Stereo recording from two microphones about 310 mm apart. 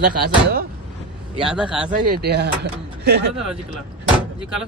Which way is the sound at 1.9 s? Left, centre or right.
Right.